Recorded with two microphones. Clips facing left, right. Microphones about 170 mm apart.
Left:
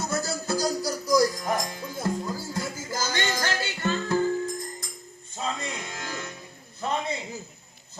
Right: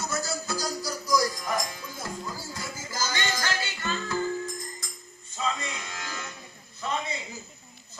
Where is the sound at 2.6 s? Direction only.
60° left (ahead or behind).